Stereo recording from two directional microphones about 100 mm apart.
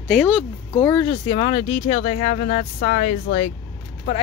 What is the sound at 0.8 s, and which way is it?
Speech, 20° left (ahead or behind).